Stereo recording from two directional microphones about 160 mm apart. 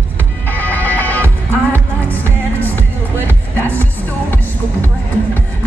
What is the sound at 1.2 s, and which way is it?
Music, 15° right (ahead or behind).